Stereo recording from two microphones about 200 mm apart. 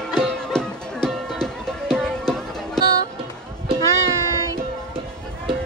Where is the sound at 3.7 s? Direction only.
15° left (ahead or behind).